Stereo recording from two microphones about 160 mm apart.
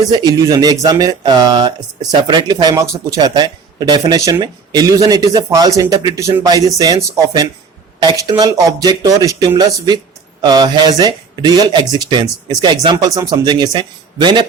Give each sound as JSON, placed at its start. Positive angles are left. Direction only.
{"t": 0.1, "sound": "speech", "side_deg": -25}